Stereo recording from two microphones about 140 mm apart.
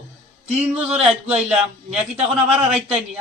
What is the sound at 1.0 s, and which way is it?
A man's voice, 5° right (ahead or behind).